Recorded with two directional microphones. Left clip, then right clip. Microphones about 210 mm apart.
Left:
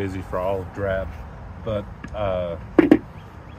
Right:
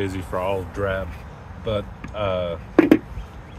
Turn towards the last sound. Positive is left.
turn(degrees=-10)  # may be behind; listen again after turning